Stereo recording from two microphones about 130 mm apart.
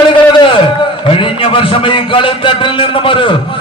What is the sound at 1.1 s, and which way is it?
A man's voice, 45° left (ahead or behind).